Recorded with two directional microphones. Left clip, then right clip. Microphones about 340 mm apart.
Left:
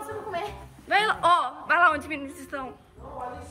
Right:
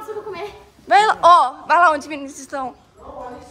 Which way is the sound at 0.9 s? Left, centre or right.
Centre.